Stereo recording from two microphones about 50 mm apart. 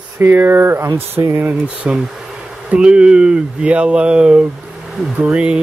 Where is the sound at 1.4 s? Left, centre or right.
Right.